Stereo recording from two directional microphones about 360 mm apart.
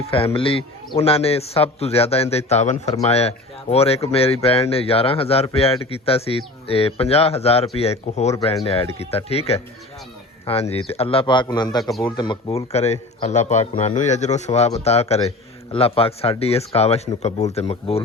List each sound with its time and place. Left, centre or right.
0.0 s a man's voice: centre
11.8 s speech: centre
12.0 s a man's voice: centre